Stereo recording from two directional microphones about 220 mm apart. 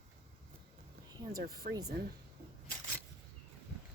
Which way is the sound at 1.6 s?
35° right (ahead or behind).